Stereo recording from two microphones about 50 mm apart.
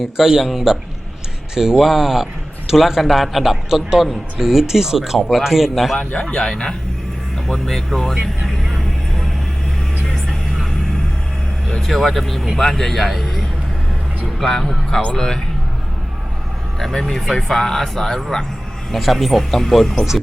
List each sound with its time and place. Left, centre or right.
0.0 s a man's voice: centre
6.0 s a man's voice: left
6.2 s speech: centre
8.4 s vehicle: centre
11.8 s a man's voice: centre
16.8 s a man's voice: centre